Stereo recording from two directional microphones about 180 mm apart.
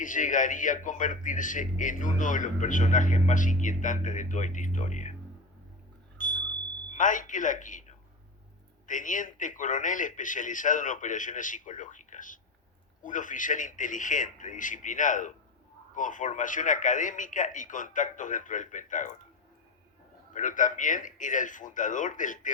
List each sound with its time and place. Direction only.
0.0 s a man's voice: 45° left (ahead or behind)
6.1 s smoke detector: 45° left (ahead or behind)
6.9 s a man's voice: 45° left (ahead or behind)
20.3 s a man's voice: 45° left (ahead or behind)